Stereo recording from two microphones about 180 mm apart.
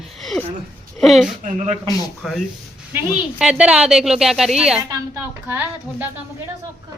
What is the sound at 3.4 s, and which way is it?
A woman's voice, 5° right (ahead or behind).